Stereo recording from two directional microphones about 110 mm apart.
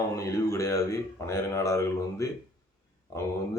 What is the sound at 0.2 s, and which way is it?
Speech, 30° left (ahead or behind).